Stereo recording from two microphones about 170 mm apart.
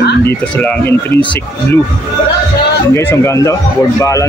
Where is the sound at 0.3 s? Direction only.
10° left (ahead or behind).